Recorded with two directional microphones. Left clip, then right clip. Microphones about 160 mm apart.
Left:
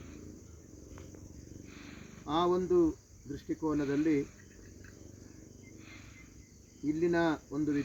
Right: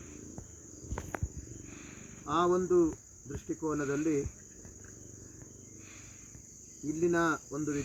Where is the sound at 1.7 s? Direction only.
5° left (ahead or behind).